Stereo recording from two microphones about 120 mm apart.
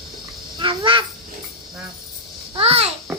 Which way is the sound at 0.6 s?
45° right (ahead or behind).